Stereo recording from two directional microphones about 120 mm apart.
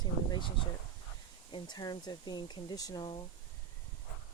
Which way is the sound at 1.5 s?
35° left (ahead or behind).